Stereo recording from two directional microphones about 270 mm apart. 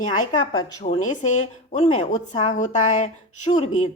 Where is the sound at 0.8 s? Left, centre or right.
Left.